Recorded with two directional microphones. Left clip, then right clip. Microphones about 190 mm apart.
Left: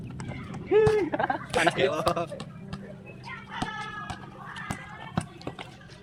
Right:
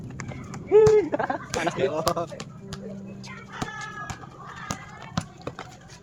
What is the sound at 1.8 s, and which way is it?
Speech, 35° right (ahead or behind).